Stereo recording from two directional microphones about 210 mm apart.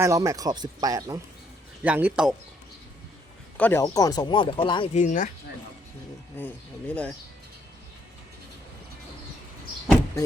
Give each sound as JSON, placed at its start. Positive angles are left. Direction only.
{"t": 0.0, "sound": "speech", "side_deg": -15}
{"t": 3.6, "sound": "speech", "side_deg": 10}
{"t": 4.9, "sound": "speech", "side_deg": 35}
{"t": 6.3, "sound": "speech", "side_deg": 10}